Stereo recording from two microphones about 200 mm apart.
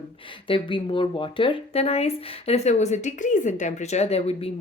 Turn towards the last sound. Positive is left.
turn(degrees=30)  # may be behind; listen again after turning